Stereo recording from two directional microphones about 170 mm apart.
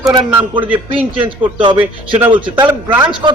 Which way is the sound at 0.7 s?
30° right (ahead or behind).